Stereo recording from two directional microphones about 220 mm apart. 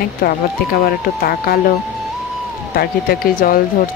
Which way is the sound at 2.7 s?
45° left (ahead or behind).